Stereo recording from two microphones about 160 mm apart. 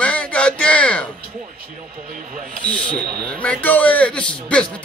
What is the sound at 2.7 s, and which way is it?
A man's voice, 5° left (ahead or behind).